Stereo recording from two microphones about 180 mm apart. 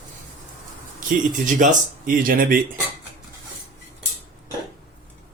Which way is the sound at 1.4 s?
45° right (ahead or behind).